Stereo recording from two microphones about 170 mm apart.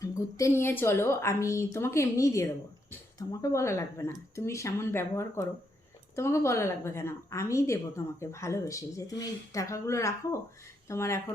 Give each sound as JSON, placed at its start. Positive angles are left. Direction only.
{"t": 0.0, "sound": "a woman's voice", "side_deg": 20}